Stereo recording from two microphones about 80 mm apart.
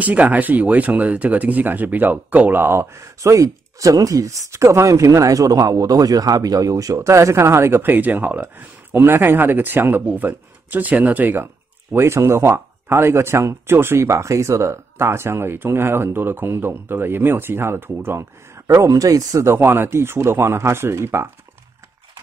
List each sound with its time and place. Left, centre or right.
0.0 s speech: centre
18.7 s speech: right